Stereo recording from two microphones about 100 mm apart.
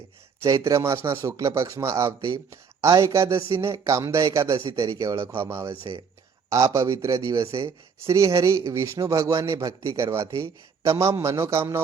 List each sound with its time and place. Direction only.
0.4 s speech: 30° right (ahead or behind)